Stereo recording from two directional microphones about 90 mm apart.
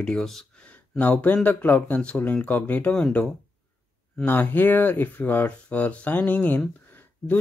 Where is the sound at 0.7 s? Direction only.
15° left (ahead or behind).